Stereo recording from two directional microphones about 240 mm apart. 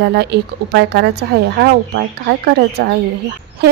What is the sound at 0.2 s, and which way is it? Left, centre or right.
A woman's voice, right.